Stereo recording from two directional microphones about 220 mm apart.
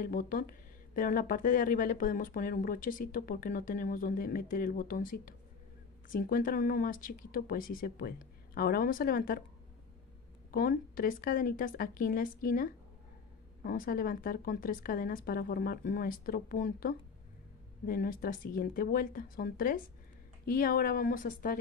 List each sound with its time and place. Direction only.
0.0 s speech: 40° left (ahead or behind)
10.5 s speech: 40° left (ahead or behind)